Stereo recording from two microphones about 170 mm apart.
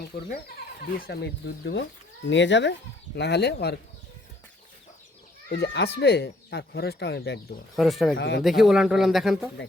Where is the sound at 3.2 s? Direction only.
80° left.